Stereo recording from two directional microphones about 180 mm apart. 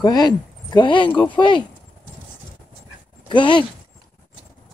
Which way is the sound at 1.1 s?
10° left (ahead or behind).